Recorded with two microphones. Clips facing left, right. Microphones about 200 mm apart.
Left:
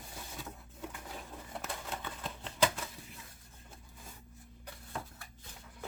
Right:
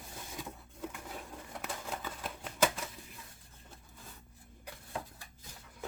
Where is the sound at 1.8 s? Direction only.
5° right (ahead or behind).